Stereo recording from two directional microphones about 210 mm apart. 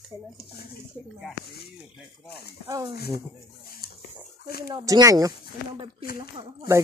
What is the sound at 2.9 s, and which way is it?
Speech, 50° left (ahead or behind).